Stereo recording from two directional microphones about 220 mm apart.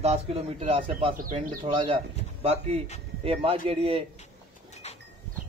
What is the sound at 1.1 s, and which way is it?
Speech, 40° right (ahead or behind).